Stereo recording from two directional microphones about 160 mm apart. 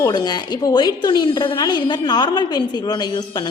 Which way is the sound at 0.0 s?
25° left (ahead or behind).